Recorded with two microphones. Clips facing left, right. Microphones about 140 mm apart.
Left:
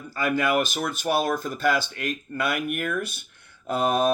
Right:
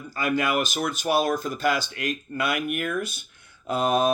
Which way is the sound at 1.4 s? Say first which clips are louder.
Left 1 dB; 50° left (ahead or behind).